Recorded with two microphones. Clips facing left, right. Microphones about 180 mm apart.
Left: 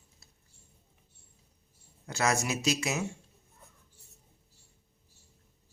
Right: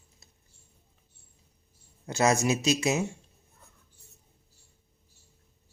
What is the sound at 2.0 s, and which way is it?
Speech, 20° right (ahead or behind).